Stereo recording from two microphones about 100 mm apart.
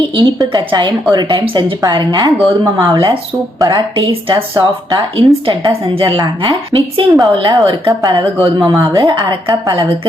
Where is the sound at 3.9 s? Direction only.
60° right (ahead or behind).